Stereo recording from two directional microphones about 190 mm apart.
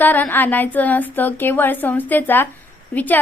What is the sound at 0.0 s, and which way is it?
A woman's voice, 10° left (ahead or behind).